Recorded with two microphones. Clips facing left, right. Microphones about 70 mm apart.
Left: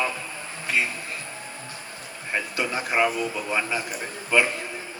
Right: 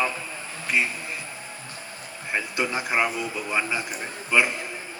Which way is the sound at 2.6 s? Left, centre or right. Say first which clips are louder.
Left 1 dB; centre.